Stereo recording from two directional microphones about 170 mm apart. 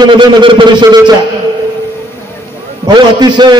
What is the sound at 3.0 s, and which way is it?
Speech, 25° right (ahead or behind).